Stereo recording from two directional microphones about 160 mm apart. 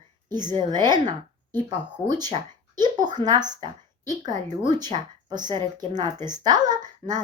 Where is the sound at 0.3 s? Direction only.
25° right (ahead or behind).